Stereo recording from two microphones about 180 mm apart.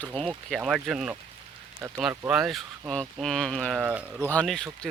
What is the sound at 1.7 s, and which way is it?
Speech, 15° right (ahead or behind).